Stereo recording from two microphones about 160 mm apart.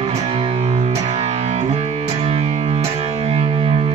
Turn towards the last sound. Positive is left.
turn(degrees=-40)  # may be behind; listen again after turning